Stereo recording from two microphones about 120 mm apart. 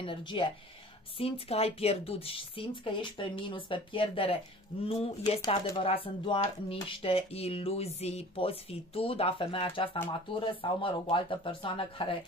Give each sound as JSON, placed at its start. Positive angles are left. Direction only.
{"t": 0.0, "sound": "speech", "side_deg": 45}
{"t": 1.1, "sound": "speech", "side_deg": 55}
{"t": 4.8, "sound": "speech", "side_deg": 60}
{"t": 5.5, "sound": "speech", "side_deg": 50}